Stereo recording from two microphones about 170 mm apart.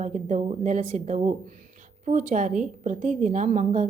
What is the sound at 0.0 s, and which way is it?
A woman's voice, 45° right (ahead or behind).